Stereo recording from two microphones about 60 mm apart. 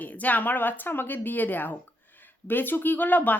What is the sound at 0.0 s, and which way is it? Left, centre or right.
Speech, left.